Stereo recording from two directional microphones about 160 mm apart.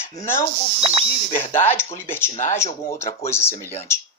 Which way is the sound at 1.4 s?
15° left (ahead or behind).